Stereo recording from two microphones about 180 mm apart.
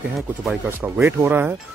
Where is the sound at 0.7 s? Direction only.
10° right (ahead or behind).